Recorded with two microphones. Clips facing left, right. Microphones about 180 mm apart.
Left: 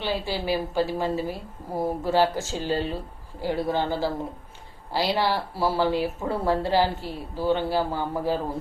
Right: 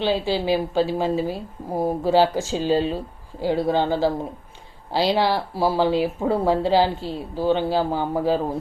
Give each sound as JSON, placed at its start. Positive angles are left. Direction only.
{"t": 0.0, "sound": "speech", "side_deg": -20}